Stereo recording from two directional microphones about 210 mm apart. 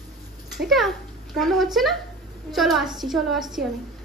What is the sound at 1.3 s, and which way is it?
Speech, centre (ahead or behind).